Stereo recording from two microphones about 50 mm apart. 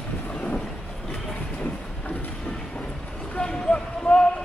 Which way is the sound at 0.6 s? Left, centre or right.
Centre.